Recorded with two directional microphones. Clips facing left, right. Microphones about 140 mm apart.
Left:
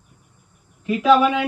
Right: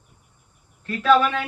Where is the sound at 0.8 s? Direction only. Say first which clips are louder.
Left 3 dB; 10° left (ahead or behind).